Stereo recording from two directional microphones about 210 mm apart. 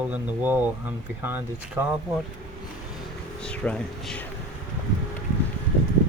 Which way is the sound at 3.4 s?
5° left (ahead or behind).